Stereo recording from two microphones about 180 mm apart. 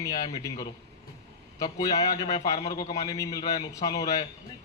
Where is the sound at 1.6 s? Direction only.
20° left (ahead or behind).